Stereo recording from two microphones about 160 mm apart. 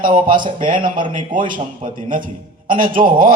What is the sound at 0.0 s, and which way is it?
Speech, 55° right (ahead or behind).